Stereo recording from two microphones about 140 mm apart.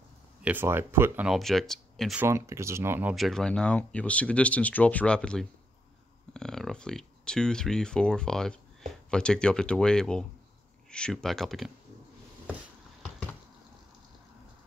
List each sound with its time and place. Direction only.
0.4 s speech: 15° right (ahead or behind)
1.3 s speech: centre (ahead or behind)
2.1 s speech: 20° right (ahead or behind)
3.2 s speech: centre (ahead or behind)